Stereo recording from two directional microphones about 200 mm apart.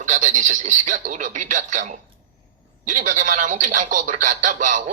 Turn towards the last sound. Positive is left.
turn(degrees=-40)  # may be behind; listen again after turning